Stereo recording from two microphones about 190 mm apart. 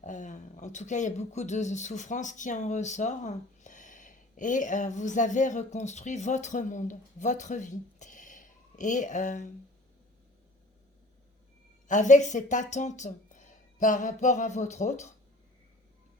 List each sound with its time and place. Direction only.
0.0 s speech: 40° left (ahead or behind)
11.9 s speech: 40° left (ahead or behind)